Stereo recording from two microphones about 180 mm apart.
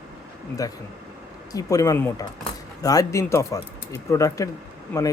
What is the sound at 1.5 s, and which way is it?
Speech, 20° left (ahead or behind).